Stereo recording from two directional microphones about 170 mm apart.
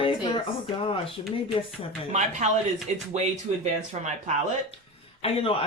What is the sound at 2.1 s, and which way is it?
Speech, 45° right (ahead or behind).